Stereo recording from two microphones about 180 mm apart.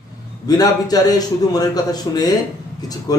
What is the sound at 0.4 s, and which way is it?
Speech, 20° left (ahead or behind).